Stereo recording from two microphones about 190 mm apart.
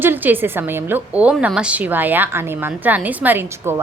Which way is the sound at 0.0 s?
10° right (ahead or behind).